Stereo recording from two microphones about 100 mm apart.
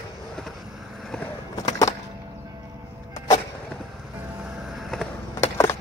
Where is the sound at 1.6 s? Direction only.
35° left (ahead or behind).